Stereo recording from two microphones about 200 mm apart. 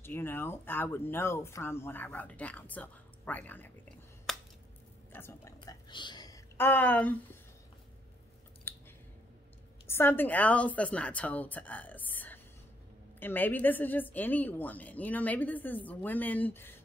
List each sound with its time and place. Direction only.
0.0 s speech: 10° left (ahead or behind)
4.3 s a sound: centre (ahead or behind)
5.1 s a woman's voice: 10° left (ahead or behind)
5.6 s whispering: 25° left (ahead or behind); by 7.2 s 10° left (ahead or behind)
8.7 s a sound: 10° left (ahead or behind)
9.8 s a woman's voice: 10° left (ahead or behind)